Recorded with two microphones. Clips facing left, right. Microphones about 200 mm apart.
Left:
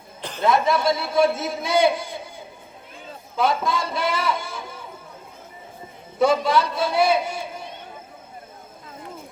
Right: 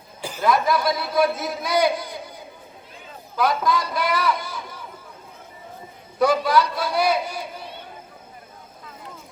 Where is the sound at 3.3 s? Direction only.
25° left (ahead or behind).